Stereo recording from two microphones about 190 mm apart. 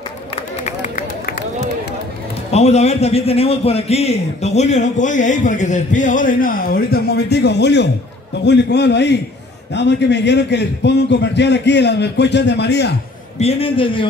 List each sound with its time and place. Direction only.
0.7 s run: 40° left (ahead or behind)
2.5 s a man's voice: 35° left (ahead or behind); by 12.9 s 60° left (ahead or behind)
13.4 s a man's voice: 30° left (ahead or behind)